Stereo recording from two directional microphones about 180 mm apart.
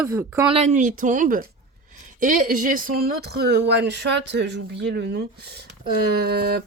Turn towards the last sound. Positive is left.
turn(degrees=-60)  # may be behind; listen again after turning